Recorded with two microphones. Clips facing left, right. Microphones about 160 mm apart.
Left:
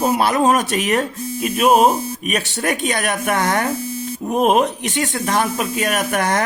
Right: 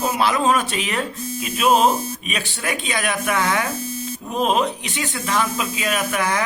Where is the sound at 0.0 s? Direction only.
45° left (ahead or behind).